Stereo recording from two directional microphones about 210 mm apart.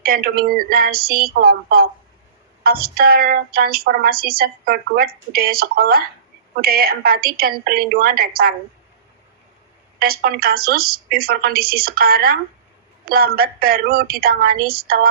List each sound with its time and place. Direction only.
0.0 s speech: 45° right (ahead or behind)
10.0 s speech: 45° right (ahead or behind)